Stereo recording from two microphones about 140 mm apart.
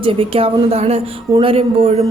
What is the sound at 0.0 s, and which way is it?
Speech, 40° right (ahead or behind).